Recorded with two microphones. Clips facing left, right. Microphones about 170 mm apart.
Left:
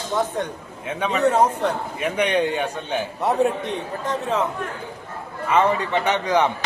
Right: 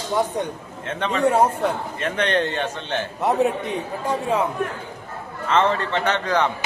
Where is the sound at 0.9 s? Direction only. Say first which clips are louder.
Even; 10° left (ahead or behind); by 4.4 s 10° right (ahead or behind).